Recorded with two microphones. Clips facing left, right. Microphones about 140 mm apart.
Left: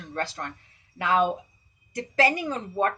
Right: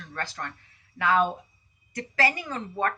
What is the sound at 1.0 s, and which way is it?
A woman's voice, 25° left (ahead or behind).